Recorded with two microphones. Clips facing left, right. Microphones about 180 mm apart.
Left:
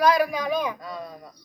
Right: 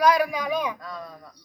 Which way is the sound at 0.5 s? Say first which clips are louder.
Left 1 dB; 5° left (ahead or behind).